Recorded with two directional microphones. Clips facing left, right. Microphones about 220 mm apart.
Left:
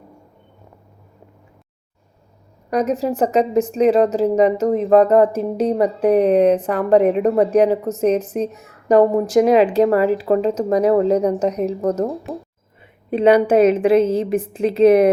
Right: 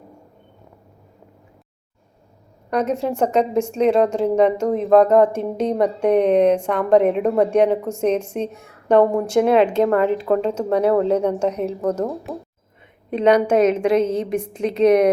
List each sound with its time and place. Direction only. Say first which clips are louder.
2.6 s a woman's voice: left 2 dB; 5° left (ahead or behind)
11.3 s a woman's voice: left 2 dB; 35° left (ahead or behind)
11.8 s a woman's voice: left 2 dB; 10° left (ahead or behind)